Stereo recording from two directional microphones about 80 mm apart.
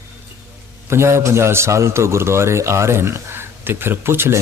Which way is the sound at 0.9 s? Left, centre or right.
Right.